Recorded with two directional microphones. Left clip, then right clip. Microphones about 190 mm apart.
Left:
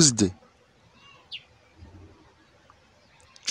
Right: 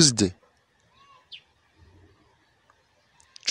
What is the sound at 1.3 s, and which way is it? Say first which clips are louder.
Bird: left 5 dB; 55° left (ahead or behind).